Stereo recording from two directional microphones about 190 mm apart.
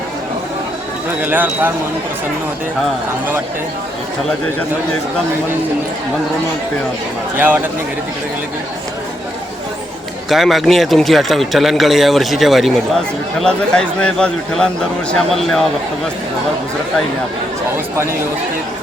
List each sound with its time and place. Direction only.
1.2 s speech: 10° right (ahead or behind)
7.3 s speech: 10° right (ahead or behind)
10.2 s a man's voice: centre (ahead or behind)